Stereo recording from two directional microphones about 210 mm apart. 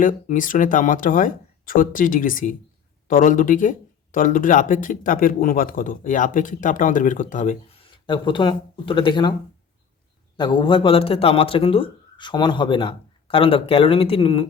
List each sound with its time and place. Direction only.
0.0 s speech: 40° left (ahead or behind); by 9.3 s 25° left (ahead or behind)
10.3 s a man's voice: 20° left (ahead or behind)